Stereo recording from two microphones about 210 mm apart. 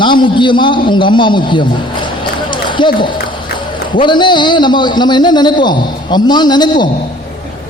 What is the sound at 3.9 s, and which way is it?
A man's voice, 20° left (ahead or behind).